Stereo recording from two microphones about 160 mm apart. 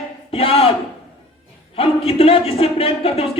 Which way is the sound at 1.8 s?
35° left (ahead or behind).